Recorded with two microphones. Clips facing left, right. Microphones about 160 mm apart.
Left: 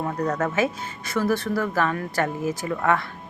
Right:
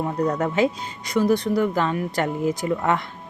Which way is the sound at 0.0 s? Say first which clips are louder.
Right 2 dB; 20° right (ahead or behind).